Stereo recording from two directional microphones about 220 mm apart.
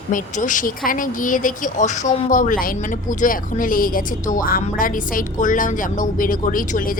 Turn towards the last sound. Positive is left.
turn(degrees=40)  # may be behind; listen again after turning